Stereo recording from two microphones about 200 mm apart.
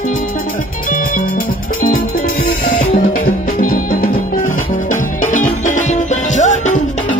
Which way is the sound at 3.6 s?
45° left (ahead or behind).